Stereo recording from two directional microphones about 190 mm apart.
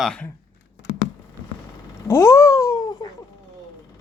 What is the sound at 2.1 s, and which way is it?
Cat, 15° left (ahead or behind).